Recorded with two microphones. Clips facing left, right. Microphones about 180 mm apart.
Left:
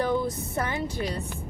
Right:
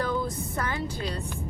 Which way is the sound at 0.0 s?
20° left (ahead or behind).